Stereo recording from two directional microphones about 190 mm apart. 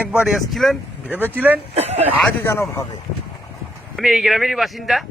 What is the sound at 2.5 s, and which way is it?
Speech, 15° left (ahead or behind).